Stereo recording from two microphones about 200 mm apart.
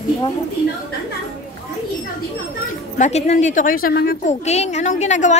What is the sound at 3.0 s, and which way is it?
A woman's voice, 35° left (ahead or behind).